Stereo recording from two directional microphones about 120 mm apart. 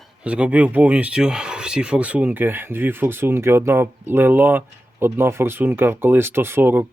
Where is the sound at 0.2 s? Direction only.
10° right (ahead or behind).